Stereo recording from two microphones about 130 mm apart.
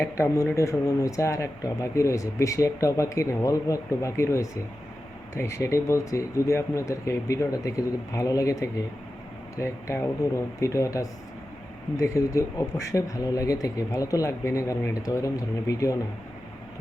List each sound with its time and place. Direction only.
0.0 s speech: 25° left (ahead or behind)